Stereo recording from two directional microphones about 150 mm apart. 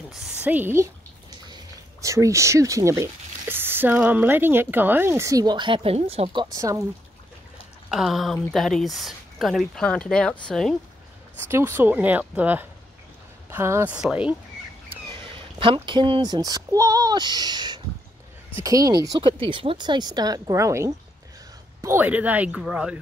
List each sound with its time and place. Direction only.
0.1 s a woman's voice: 5° right (ahead or behind); by 6.8 s 20° right (ahead or behind)
7.9 s speech: centre (ahead or behind)
11.4 s speech: 15° right (ahead or behind)
13.9 s speech: 5° right (ahead or behind)
15.0 s a child's voice: 35° right (ahead or behind); by 22.9 s 5° right (ahead or behind)